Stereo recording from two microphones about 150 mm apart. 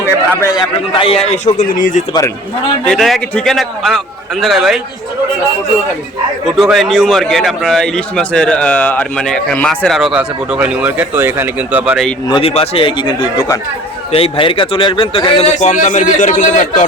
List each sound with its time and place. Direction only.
0.0 s a sound: 20° left (ahead or behind)
0.9 s a man's voice: 40° left (ahead or behind); by 2.0 s 60° left (ahead or behind)
2.8 s a man's voice: 5° left (ahead or behind)
6.6 s a man's voice: centre (ahead or behind)
12.3 s a man's voice: 40° left (ahead or behind)